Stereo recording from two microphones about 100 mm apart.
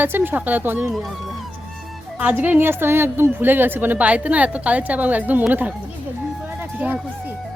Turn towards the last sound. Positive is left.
turn(degrees=-15)  # may be behind; listen again after turning